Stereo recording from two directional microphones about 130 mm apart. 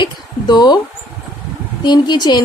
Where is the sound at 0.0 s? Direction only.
35° left (ahead or behind).